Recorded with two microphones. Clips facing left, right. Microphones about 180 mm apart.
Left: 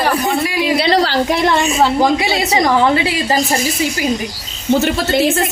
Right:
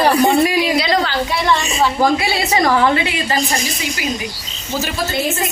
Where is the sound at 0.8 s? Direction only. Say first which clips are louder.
Left 3 dB; 35° left (ahead or behind).